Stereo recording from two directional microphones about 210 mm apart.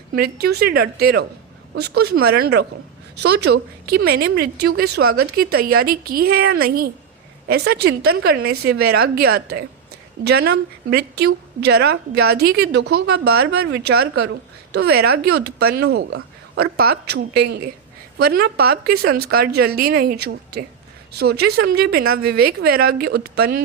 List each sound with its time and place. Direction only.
0.2 s a woman's voice: 50° right (ahead or behind)